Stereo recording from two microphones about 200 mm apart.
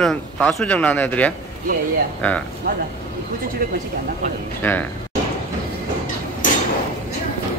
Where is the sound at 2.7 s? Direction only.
45° right (ahead or behind).